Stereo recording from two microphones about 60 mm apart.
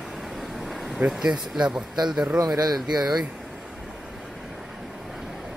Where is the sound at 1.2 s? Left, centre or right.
Centre.